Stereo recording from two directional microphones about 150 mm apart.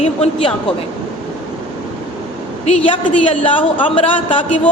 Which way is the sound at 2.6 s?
35° left (ahead or behind).